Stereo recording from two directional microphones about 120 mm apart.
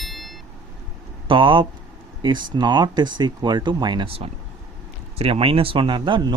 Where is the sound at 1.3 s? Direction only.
45° right (ahead or behind).